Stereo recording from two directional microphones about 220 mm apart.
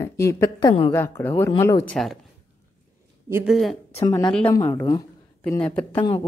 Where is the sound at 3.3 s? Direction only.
10° right (ahead or behind).